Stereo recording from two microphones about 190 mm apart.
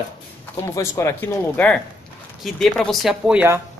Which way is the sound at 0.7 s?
15° left (ahead or behind).